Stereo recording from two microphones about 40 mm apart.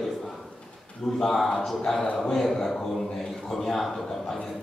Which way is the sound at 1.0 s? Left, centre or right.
Centre.